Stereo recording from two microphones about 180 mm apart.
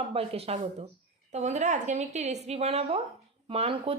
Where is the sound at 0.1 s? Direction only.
35° right (ahead or behind).